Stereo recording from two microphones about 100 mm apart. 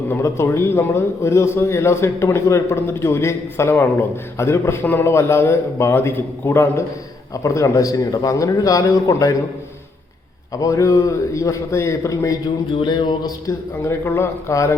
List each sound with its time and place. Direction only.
0.1 s a man's voice: 25° left (ahead or behind)
10.5 s a man's voice: 35° left (ahead or behind)
12.8 s music: 50° left (ahead or behind)
13.5 s a man's voice: 25° left (ahead or behind)